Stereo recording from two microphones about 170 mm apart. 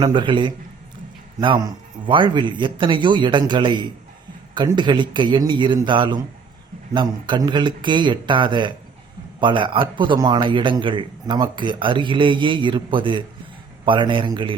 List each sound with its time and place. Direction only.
0.0 s speech: 30° right (ahead or behind)